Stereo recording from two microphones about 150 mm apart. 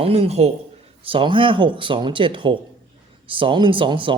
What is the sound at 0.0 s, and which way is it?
A man's voice, 45° right (ahead or behind).